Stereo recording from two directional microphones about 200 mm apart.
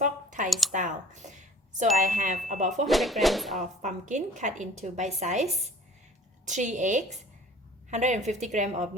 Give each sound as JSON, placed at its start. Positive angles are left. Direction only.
{"t": 0.0, "sound": "a sound", "side_deg": -40}
{"t": 2.0, "sound": "a woman's voice", "side_deg": -40}
{"t": 2.8, "sound": "speech", "side_deg": 0}
{"t": 3.8, "sound": "a woman's voice", "side_deg": -35}